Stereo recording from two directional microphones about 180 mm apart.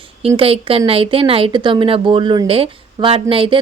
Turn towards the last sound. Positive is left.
turn(degrees=-30)  # may be behind; listen again after turning